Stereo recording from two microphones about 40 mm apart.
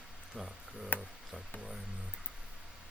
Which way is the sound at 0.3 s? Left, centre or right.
Centre.